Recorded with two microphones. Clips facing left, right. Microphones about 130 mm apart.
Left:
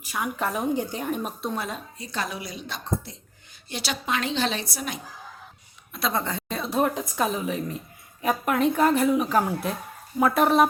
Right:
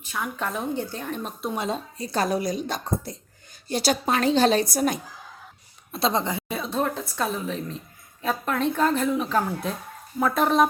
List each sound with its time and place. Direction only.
0.0 s speech: 10° left (ahead or behind)
1.5 s a woman's voice: 25° right (ahead or behind)
2.0 s a woman's voice: 40° right (ahead or behind)
5.9 s a woman's voice: 25° right (ahead or behind)
6.2 s a sound: 15° right (ahead or behind)
6.6 s speech: 10° left (ahead or behind)